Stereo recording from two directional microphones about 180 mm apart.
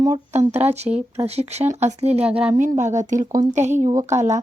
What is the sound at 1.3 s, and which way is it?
Speech, 35° right (ahead or behind).